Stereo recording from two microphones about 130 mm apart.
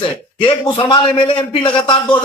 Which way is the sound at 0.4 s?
35° left (ahead or behind).